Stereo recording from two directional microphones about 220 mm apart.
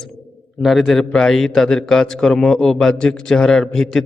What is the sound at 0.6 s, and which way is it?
A man's voice, centre (ahead or behind).